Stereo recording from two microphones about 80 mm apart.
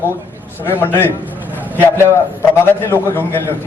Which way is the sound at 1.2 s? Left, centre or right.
Right.